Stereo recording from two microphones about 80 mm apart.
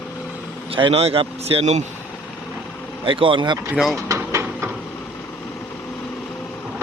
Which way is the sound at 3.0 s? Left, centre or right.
Right.